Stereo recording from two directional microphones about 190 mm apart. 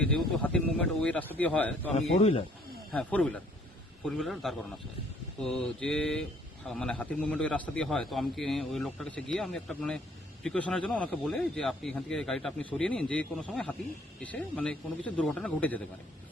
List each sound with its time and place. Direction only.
0.0 s speech: 5° left (ahead or behind)
2.1 s speech: 35° left (ahead or behind)
2.9 s a man's voice: 5° left (ahead or behind)